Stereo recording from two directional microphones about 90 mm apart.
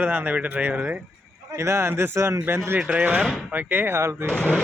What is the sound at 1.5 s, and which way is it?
Speech, 30° right (ahead or behind).